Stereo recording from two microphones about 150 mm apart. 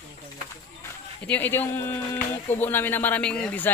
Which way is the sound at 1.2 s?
10° left (ahead or behind).